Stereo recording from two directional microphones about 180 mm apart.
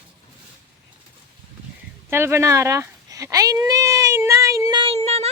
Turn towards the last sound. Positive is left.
turn(degrees=-35)  # may be behind; listen again after turning